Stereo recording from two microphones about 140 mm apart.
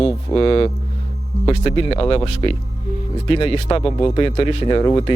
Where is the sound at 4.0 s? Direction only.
30° left (ahead or behind).